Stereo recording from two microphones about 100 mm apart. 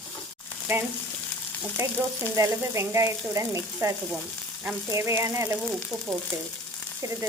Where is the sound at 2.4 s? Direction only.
30° right (ahead or behind).